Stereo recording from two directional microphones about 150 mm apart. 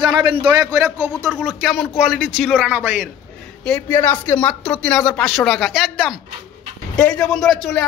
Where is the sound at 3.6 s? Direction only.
10° left (ahead or behind).